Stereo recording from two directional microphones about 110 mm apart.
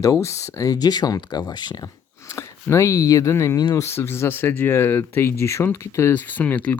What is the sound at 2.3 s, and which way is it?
Speech, 25° left (ahead or behind).